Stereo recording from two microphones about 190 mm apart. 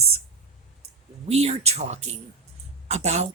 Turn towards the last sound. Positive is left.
turn(degrees=-35)  # may be behind; listen again after turning